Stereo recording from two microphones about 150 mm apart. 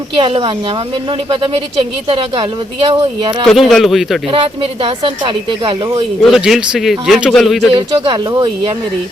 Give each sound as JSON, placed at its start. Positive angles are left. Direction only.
{"t": 0.2, "sound": "speech", "side_deg": -35}
{"t": 3.4, "sound": "a man's voice", "side_deg": 0}
{"t": 4.3, "sound": "speech", "side_deg": -40}
{"t": 6.3, "sound": "a man's voice", "side_deg": 0}
{"t": 7.7, "sound": "speech", "side_deg": -35}